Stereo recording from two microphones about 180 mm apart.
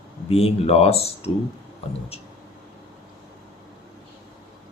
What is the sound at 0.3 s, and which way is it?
Speech, 35° left (ahead or behind).